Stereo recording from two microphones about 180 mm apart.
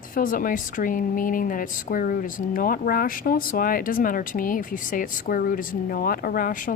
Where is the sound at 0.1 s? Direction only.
50° left (ahead or behind).